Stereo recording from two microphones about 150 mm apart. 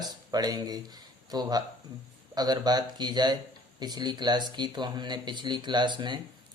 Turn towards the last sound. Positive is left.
turn(degrees=-30)  # may be behind; listen again after turning